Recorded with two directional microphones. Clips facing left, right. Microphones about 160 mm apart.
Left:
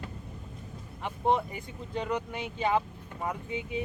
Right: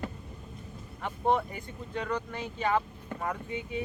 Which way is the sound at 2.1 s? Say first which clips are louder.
Left 1 dB; 10° left (ahead or behind).